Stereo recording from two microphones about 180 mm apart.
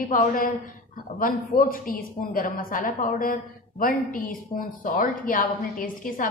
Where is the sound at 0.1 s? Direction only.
50° left (ahead or behind).